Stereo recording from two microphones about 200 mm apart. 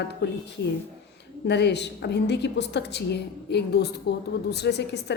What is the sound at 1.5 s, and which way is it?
A woman's voice, 60° left (ahead or behind).